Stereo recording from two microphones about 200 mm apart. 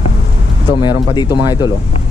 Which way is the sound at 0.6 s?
20° left (ahead or behind).